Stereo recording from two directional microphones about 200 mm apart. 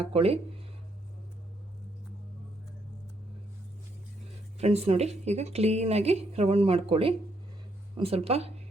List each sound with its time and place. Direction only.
0.0 s speech: 30° right (ahead or behind)
4.5 s speech: 30° right (ahead or behind)